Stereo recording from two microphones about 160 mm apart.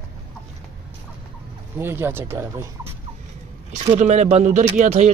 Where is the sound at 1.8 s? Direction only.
15° right (ahead or behind).